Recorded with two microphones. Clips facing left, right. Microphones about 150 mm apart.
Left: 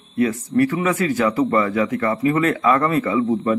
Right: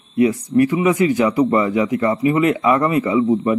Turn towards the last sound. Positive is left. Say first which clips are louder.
# right 3 dB
turn(degrees=-15)  # may be behind; listen again after turning